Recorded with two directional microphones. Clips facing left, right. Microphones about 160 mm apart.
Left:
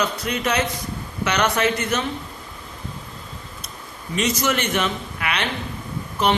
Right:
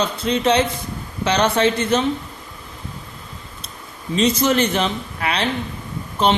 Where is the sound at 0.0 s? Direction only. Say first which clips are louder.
Right 4 dB; 30° right (ahead or behind).